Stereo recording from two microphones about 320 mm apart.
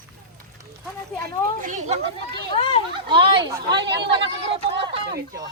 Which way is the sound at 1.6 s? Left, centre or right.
Right.